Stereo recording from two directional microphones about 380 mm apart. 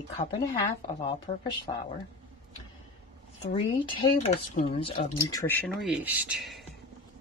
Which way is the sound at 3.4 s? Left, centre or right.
Centre.